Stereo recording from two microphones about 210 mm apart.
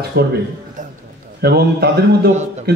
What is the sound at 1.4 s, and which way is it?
Speech, 50° right (ahead or behind).